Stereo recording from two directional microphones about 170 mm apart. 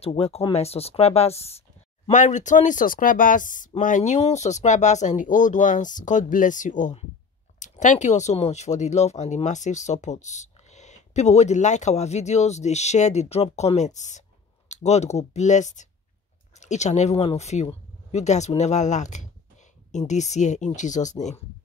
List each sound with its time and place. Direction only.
0.0 s speech: 35° left (ahead or behind)